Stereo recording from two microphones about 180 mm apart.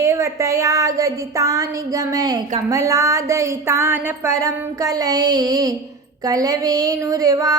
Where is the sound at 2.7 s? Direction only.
15° right (ahead or behind).